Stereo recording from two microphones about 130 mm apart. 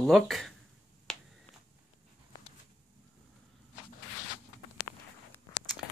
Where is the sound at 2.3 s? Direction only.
30° left (ahead or behind).